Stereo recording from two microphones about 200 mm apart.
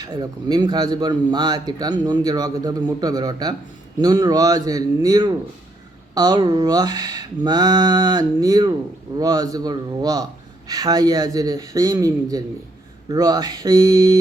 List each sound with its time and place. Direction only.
0.0 s a man's voice: 20° right (ahead or behind)